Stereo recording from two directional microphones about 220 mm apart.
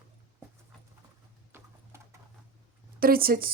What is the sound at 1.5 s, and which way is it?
Clip-clop, 10° right (ahead or behind).